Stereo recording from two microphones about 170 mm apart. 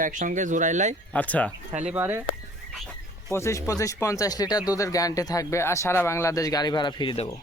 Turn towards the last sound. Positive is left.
turn(degrees=35)  # may be behind; listen again after turning